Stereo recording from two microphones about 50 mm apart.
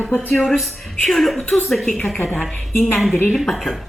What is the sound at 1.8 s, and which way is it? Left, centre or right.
Speech, centre.